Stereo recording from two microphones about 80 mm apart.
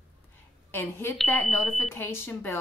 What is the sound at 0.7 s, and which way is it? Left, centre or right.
A woman's voice, left.